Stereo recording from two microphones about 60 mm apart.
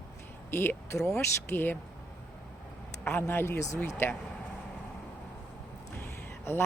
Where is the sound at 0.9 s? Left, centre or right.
Left.